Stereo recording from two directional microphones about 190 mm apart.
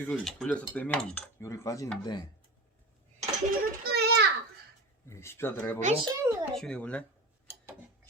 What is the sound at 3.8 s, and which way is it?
Children playing, 60° right (ahead or behind).